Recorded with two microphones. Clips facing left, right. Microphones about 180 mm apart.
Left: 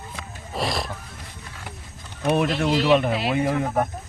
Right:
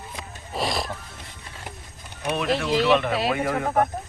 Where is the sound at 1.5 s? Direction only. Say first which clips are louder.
Even; 20° right (ahead or behind).